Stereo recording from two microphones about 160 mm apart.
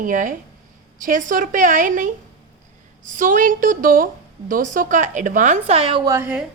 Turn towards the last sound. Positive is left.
turn(degrees=-20)  # may be behind; listen again after turning